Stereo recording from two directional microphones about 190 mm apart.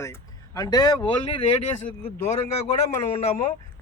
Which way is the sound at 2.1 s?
10° left (ahead or behind).